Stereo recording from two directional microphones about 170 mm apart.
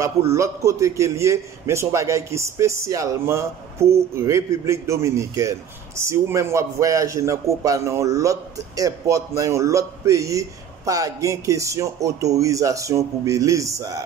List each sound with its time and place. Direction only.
0.0 s a man's voice: 15° right (ahead or behind)